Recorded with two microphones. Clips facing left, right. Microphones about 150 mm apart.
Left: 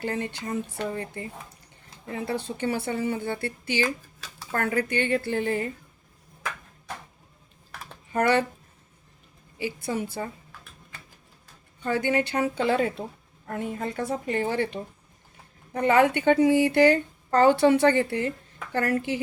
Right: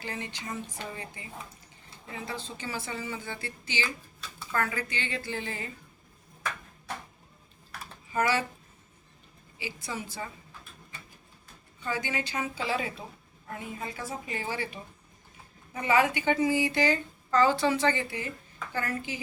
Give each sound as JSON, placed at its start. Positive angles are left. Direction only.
{"t": 0.0, "sound": "a woman's voice", "side_deg": 55}
{"t": 8.1, "sound": "a woman's voice", "side_deg": 60}
{"t": 9.6, "sound": "speech", "side_deg": 55}
{"t": 11.8, "sound": "a woman's voice", "side_deg": 55}